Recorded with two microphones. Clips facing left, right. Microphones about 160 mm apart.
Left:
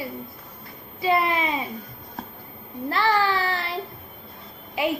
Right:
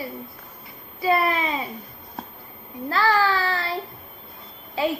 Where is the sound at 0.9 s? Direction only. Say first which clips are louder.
Right 1 dB; 20° left (ahead or behind).